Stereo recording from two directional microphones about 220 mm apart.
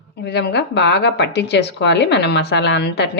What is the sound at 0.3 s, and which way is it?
Speech, 50° left (ahead or behind).